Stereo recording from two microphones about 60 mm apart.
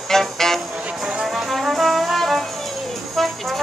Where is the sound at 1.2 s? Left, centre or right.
Centre.